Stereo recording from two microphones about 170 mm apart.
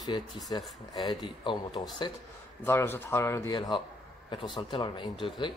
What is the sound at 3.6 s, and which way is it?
Speech, 30° left (ahead or behind).